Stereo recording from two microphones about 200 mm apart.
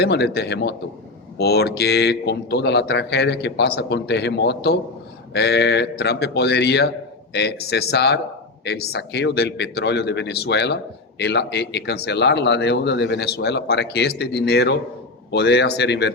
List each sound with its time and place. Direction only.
0.0 s a man's voice: 55° left (ahead or behind)